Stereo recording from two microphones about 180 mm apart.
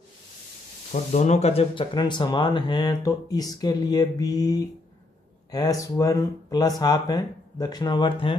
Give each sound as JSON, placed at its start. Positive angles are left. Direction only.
{"t": 1.1, "sound": "speech", "side_deg": 40}